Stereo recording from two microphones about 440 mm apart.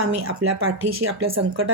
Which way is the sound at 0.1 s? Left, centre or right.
Right.